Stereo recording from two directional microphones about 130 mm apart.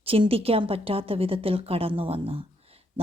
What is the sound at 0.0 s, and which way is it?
Speech, 45° right (ahead or behind).